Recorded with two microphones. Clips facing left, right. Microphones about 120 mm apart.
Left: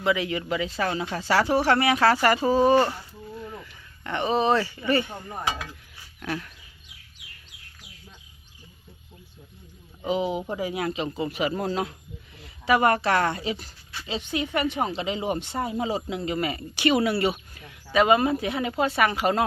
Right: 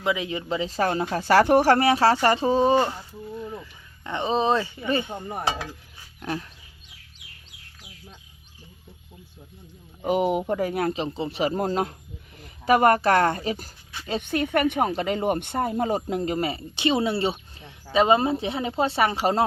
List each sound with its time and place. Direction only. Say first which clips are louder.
0.0 s speech: left 1 dB; 20° right (ahead or behind)
0.7 s speech: right 3 dB; 45° right (ahead or behind); by 5.4 s 20° right (ahead or behind)
5.5 s speech: even; 35° right (ahead or behind)
10.1 s speech: right 4 dB; 60° right (ahead or behind)
11.0 s speech: right 1 dB; 30° right (ahead or behind)